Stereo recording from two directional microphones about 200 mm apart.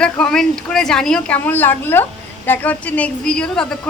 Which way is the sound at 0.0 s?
5° left (ahead or behind).